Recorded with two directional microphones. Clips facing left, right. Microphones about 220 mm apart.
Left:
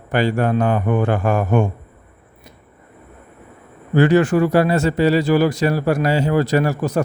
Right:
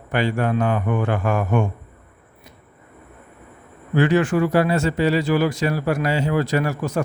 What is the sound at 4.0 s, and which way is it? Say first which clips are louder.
Speech: left 4 dB; 40° left (ahead or behind).